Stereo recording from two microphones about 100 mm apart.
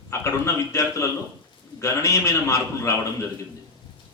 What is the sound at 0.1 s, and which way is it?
A man's voice, 30° left (ahead or behind).